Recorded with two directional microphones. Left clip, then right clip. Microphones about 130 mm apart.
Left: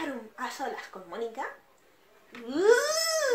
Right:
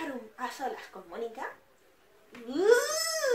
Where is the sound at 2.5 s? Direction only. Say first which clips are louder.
Left 1 dB; 40° left (ahead or behind).